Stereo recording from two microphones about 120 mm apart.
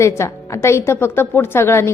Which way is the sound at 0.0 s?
25° left (ahead or behind).